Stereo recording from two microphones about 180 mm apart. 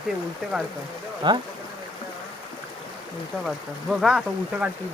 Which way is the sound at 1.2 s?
25° right (ahead or behind).